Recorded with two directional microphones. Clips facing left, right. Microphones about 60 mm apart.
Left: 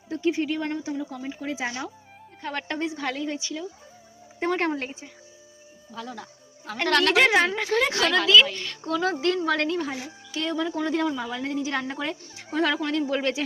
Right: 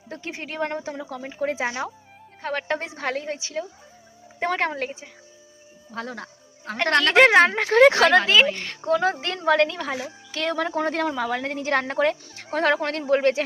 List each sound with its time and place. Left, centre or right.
0.1 s a woman's voice: right
1.6 s speech: right
2.4 s a woman's voice: right
4.4 s a woman's voice: right
6.7 s a woman's voice: right
8.0 s a woman's voice: right
9.7 s speech: right